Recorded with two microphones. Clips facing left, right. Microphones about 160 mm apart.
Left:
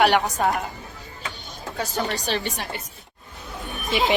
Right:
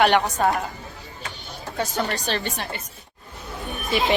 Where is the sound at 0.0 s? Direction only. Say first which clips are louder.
Right 1 dB; centre (ahead or behind).